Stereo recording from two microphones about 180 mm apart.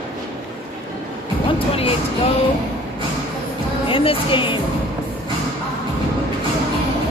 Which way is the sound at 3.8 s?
30° left (ahead or behind).